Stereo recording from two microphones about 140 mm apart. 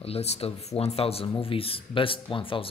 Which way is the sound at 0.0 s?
45° left (ahead or behind).